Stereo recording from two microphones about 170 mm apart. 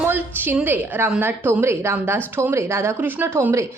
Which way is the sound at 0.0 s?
10° right (ahead or behind).